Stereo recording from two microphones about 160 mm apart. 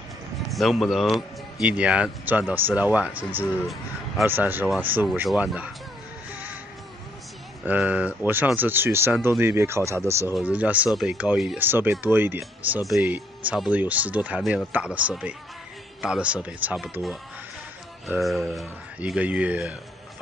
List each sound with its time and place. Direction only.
0.5 s speech: centre (ahead or behind)
7.6 s speech: 10° right (ahead or behind)
18.6 s speech: 5° right (ahead or behind)